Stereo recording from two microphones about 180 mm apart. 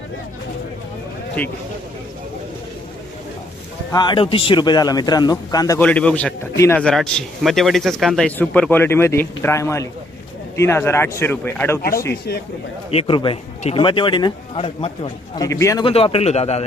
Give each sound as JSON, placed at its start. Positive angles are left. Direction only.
{"t": 3.9, "sound": "a man's voice", "side_deg": 25}
{"t": 5.8, "sound": "speech", "side_deg": 5}
{"t": 6.8, "sound": "speech", "side_deg": 5}
{"t": 12.9, "sound": "a man's voice", "side_deg": 30}
{"t": 15.4, "sound": "speech", "side_deg": 15}
{"t": 15.8, "sound": "a man's voice", "side_deg": 30}